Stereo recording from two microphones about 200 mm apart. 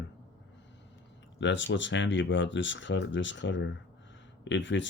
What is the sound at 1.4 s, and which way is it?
Speech, 65° left (ahead or behind).